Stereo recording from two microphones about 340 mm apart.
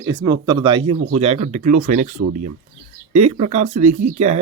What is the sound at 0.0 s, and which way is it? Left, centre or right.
Speech, centre.